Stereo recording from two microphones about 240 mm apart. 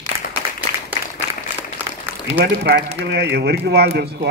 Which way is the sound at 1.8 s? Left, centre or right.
Centre.